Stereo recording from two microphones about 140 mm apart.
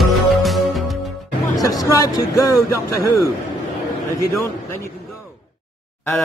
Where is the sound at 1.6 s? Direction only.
25° left (ahead or behind).